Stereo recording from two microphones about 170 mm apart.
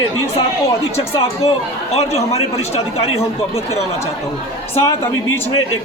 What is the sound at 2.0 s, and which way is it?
A man's voice, 40° left (ahead or behind).